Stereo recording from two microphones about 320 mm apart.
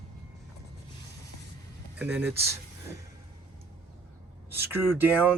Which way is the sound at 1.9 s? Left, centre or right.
Centre.